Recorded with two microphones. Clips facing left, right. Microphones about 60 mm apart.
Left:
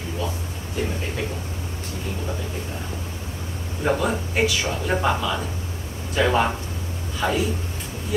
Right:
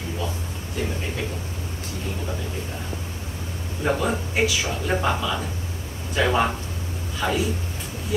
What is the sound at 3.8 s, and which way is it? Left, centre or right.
Speech, centre.